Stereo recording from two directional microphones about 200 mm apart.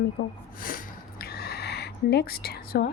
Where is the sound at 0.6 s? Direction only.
45° left (ahead or behind).